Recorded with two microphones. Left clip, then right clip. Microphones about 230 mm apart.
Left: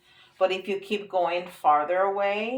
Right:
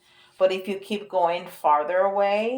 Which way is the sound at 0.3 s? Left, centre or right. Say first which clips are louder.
Right 3 dB; right.